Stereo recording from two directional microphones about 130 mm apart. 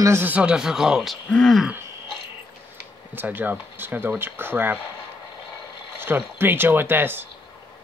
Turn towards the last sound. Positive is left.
turn(degrees=-15)  # may be behind; listen again after turning